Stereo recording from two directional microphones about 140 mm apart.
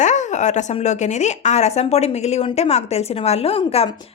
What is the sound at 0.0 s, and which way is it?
Speech, 60° left (ahead or behind).